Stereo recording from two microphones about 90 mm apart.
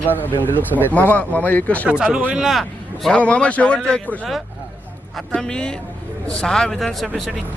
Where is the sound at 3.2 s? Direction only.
15° left (ahead or behind).